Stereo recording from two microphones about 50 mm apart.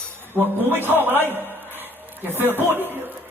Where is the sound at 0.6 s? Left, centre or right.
Right.